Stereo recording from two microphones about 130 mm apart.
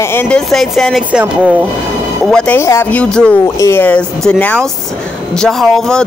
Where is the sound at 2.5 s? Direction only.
20° left (ahead or behind).